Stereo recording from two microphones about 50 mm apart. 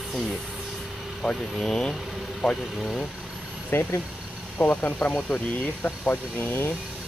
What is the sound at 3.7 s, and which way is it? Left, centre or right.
Speech, left.